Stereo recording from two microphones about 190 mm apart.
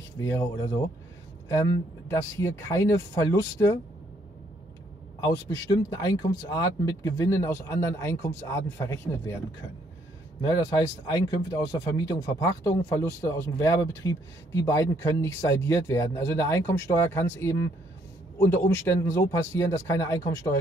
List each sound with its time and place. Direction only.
0.2 s speech: 15° left (ahead or behind)
5.2 s speech: 20° left (ahead or behind)
11.1 s speech: 20° left (ahead or behind)